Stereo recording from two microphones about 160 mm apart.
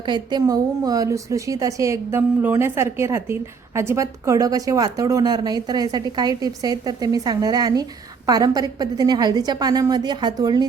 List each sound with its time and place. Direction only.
0.0 s a woman's voice: 30° right (ahead or behind)